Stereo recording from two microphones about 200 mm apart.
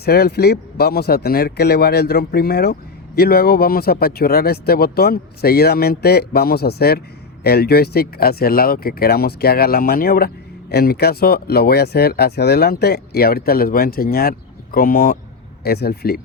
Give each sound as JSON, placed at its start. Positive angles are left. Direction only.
{"t": 0.0, "sound": "speech", "side_deg": 50}